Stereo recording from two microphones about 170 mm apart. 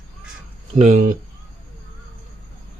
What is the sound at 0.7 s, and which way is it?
Speech, 45° right (ahead or behind).